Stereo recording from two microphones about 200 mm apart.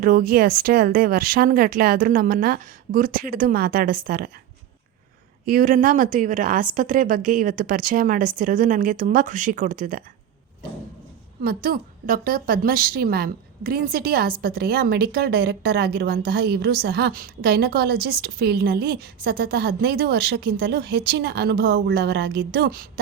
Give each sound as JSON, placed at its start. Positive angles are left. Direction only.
{"t": 0.0, "sound": "a woman's voice", "side_deg": -45}
{"t": 5.5, "sound": "a woman's voice", "side_deg": -45}
{"t": 11.4, "sound": "a woman's voice", "side_deg": -45}